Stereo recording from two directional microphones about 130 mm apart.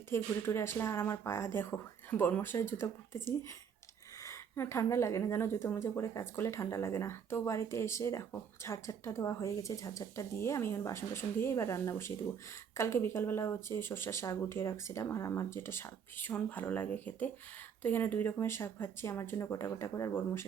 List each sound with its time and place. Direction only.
0.1 s a woman's voice: 20° left (ahead or behind)